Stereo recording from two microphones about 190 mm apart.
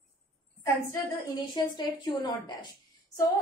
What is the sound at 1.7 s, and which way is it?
Speech, 25° left (ahead or behind).